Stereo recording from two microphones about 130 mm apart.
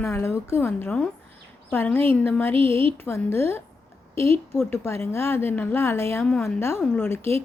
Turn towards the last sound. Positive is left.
turn(degrees=20)  # may be behind; listen again after turning